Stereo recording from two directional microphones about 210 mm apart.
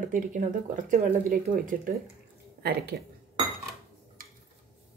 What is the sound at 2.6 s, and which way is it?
Speech, 50° right (ahead or behind).